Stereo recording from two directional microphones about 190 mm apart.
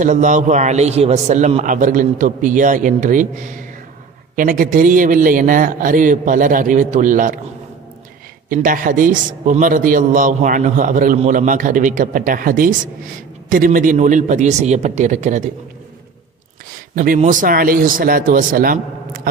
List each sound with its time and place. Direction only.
0.0 s a man's voice: 40° right (ahead or behind)
4.4 s a man's voice: 45° right (ahead or behind)
8.5 s a man's voice: 45° right (ahead or behind)
16.9 s a man's voice: 45° right (ahead or behind)